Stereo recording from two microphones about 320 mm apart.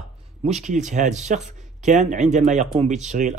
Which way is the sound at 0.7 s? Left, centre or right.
Right.